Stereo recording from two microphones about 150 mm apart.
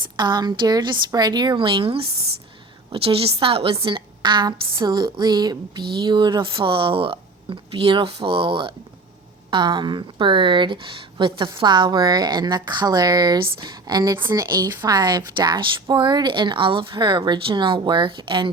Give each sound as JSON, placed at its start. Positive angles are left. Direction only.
{"t": 0.2, "sound": "a woman's voice", "side_deg": -30}
{"t": 14.2, "sound": "speech", "side_deg": -15}
{"t": 14.5, "sound": "a woman's voice", "side_deg": -25}